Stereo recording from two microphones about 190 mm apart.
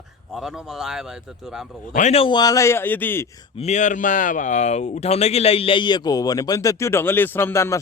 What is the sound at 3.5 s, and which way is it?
Speech, 35° left (ahead or behind).